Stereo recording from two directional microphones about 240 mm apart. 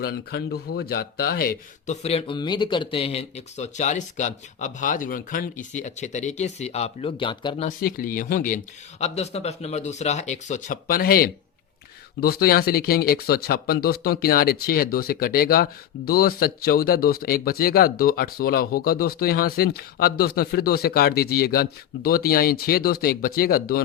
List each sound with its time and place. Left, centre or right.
0.0 s speech: left
7.8 s speech: left